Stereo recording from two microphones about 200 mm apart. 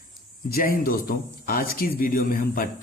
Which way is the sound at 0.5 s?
45° left (ahead or behind).